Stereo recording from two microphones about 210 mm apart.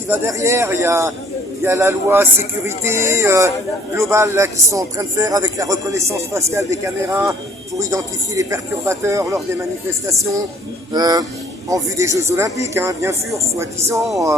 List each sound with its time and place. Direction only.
0.1 s a man's voice: 15° right (ahead or behind)